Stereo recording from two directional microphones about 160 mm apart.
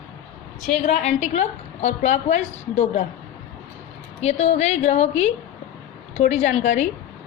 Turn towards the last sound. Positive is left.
turn(degrees=50)  # may be behind; listen again after turning